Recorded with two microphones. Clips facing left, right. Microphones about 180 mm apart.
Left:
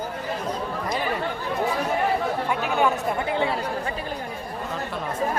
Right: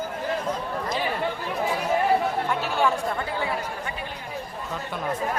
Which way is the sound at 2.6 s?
55° left (ahead or behind).